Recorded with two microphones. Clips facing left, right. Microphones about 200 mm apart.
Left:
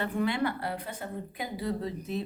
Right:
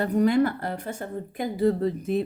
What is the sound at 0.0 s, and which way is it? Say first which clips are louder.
Speech: right 8 dB; 40° right (ahead or behind).